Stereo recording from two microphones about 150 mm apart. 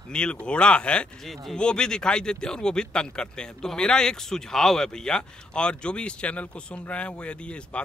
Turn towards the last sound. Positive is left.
turn(degrees=5)  # may be behind; listen again after turning